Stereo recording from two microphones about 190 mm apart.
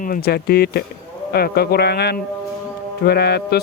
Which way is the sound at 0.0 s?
50° left (ahead or behind).